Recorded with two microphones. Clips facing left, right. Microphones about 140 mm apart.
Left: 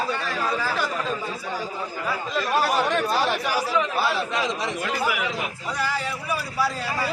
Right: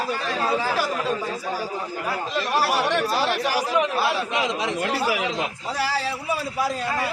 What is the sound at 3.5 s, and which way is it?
Chatter, 15° right (ahead or behind).